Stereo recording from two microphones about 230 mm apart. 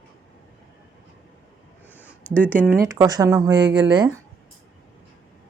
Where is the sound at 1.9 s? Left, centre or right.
Centre.